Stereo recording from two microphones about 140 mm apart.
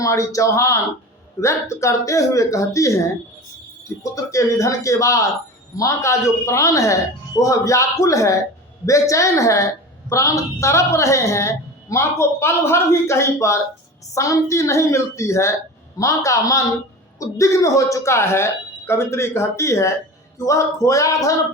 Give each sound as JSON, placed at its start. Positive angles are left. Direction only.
{"t": 0.0, "sound": "a woman's voice", "side_deg": 20}
{"t": 4.1, "sound": "a woman's voice", "side_deg": 20}